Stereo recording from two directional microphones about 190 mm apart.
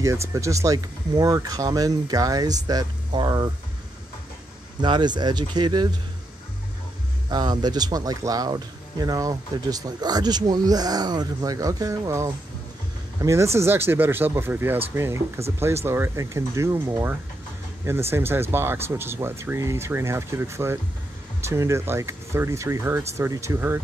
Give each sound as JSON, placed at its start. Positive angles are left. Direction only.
{"t": 0.0, "sound": "speech", "side_deg": -15}
{"t": 4.8, "sound": "speech", "side_deg": -25}
{"t": 7.2, "sound": "speech", "side_deg": -20}
{"t": 18.1, "sound": "speech", "side_deg": -10}